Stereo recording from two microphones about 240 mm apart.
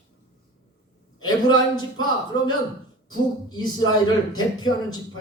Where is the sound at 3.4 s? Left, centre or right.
Centre.